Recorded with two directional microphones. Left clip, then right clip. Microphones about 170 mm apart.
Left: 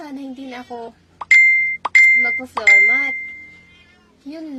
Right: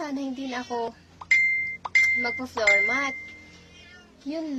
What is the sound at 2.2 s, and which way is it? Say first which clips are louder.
Speech: left 8 dB; 10° right (ahead or behind).